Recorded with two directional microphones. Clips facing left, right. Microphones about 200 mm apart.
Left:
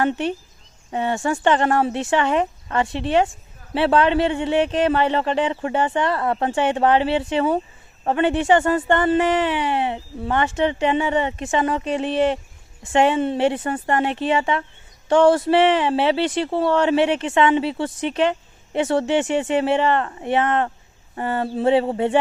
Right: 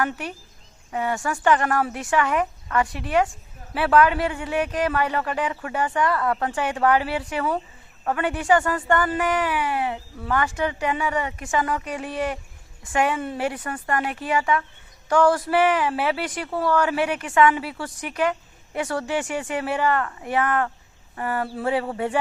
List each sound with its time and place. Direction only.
0.0 s speech: 25° left (ahead or behind)